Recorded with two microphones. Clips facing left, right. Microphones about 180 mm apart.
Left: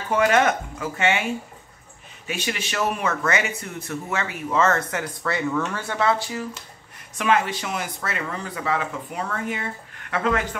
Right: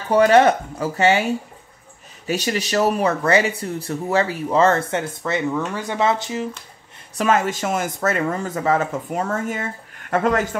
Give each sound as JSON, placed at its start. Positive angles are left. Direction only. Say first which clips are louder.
{"t": 0.1, "sound": "speech", "louder": "right 6 dB", "side_deg": -35}
{"t": 2.2, "sound": "speech", "louder": "right 6 dB", "side_deg": -40}
{"t": 7.2, "sound": "speech", "louder": "right 3 dB", "side_deg": -45}